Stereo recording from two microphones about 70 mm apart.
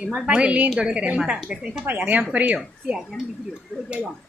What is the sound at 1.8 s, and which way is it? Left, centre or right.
Speech, right.